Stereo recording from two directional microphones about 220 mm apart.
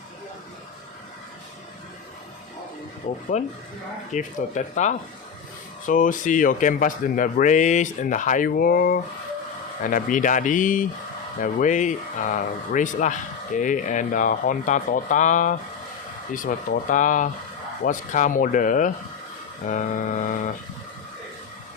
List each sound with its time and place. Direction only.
3.1 s speech: 35° left (ahead or behind)